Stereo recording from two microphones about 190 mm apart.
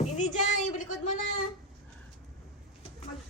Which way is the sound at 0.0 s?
40° left (ahead or behind).